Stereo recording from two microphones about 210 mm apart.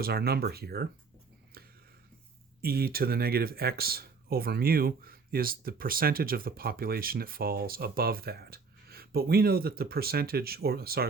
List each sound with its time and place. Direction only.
0.0 s speech: 50° right (ahead or behind)
1.5 s a sound: 45° right (ahead or behind)
2.6 s speech: 45° right (ahead or behind)